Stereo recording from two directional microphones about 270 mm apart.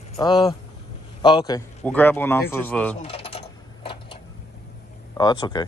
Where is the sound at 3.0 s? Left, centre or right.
Left.